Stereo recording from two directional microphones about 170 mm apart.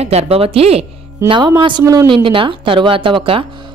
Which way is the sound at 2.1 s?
30° right (ahead or behind).